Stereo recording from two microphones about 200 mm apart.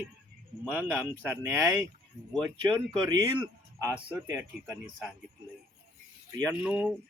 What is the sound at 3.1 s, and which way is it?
Speech, 20° right (ahead or behind).